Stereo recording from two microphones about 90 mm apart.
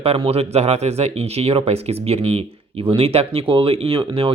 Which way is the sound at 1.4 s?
90° right.